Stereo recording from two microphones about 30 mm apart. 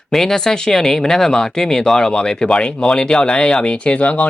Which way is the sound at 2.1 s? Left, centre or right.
Left.